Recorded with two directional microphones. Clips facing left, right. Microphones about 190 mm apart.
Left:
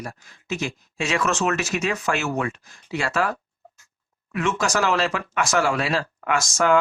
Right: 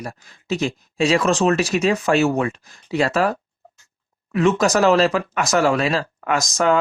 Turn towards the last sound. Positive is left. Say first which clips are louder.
# right 1 dB
turn(degrees=-35)  # may be behind; listen again after turning